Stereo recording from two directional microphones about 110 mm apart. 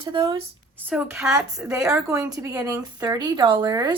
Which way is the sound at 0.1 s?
45° right (ahead or behind).